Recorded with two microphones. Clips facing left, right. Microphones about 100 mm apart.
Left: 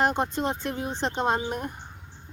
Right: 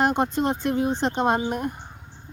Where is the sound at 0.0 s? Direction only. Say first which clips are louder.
Right 3 dB; 15° right (ahead or behind).